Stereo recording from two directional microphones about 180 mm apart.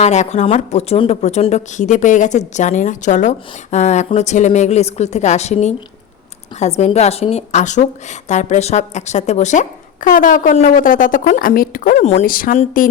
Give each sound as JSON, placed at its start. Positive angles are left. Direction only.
{"t": 0.0, "sound": "a woman's voice", "side_deg": 40}